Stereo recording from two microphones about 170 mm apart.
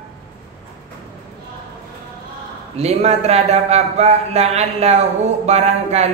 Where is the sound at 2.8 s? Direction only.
40° right (ahead or behind).